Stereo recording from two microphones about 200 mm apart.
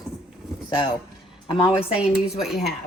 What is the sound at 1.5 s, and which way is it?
Speech, 25° left (ahead or behind).